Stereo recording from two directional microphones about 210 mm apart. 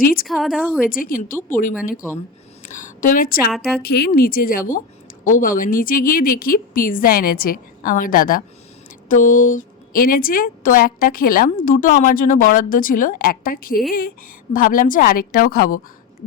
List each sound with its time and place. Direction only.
0.0 s a woman's voice: 45° left (ahead or behind)
0.3 s speech: centre (ahead or behind)
0.9 s a woman's voice: 40° left (ahead or behind)
2.6 s a woman's voice: 40° left (ahead or behind)
3.5 s speech: centre (ahead or behind)
3.8 s a woman's voice: 50° left (ahead or behind)